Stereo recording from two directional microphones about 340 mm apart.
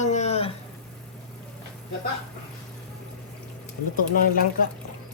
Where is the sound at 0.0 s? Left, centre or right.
Centre.